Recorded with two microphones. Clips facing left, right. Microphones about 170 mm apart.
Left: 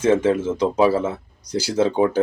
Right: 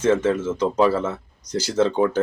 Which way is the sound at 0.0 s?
10° left (ahead or behind).